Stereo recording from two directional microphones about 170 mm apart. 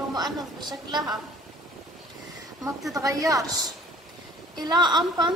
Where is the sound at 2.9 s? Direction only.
20° right (ahead or behind).